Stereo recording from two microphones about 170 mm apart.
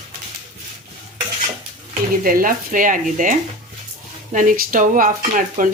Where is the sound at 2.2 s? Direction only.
55° right (ahead or behind).